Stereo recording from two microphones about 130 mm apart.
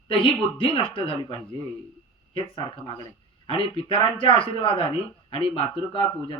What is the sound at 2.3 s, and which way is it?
A man's voice, 40° left (ahead or behind).